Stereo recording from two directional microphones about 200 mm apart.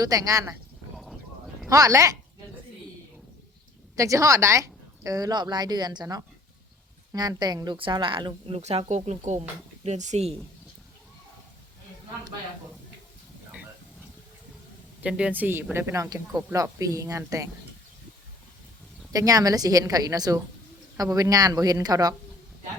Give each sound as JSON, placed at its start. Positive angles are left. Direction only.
{"t": 0.0, "sound": "speech", "side_deg": -15}
{"t": 1.7, "sound": "speech", "side_deg": -15}
{"t": 3.9, "sound": "speech", "side_deg": -15}
{"t": 15.0, "sound": "speech", "side_deg": -5}
{"t": 19.1, "sound": "speech", "side_deg": -15}